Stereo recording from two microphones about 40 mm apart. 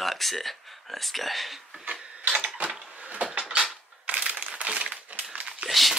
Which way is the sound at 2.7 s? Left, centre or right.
Right.